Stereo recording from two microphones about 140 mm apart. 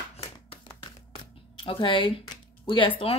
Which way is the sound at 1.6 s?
40° left (ahead or behind).